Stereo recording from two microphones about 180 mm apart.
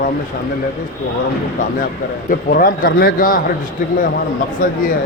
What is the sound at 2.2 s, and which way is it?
A man's voice, 50° left (ahead or behind).